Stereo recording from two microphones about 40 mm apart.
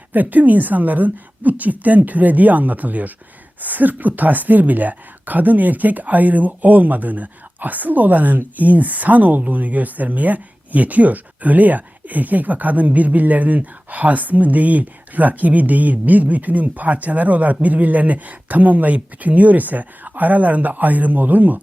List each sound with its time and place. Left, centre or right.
0.1 s speech: right